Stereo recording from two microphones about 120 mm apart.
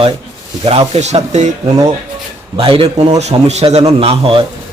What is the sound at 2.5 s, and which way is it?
A man's voice, 50° right (ahead or behind).